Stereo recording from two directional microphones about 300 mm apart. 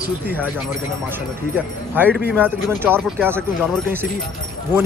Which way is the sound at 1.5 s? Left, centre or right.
Centre.